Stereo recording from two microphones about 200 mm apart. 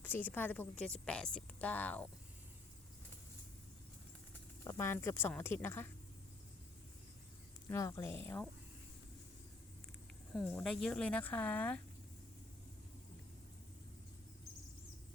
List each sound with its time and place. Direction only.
0.0 s speech: 10° left (ahead or behind)
4.6 s speech: 15° left (ahead or behind)
7.7 s speech: 15° left (ahead or behind)
10.3 s speech: centre (ahead or behind)